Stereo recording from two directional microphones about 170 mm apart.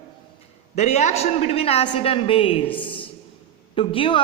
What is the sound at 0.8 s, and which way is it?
Speech, 40° left (ahead or behind).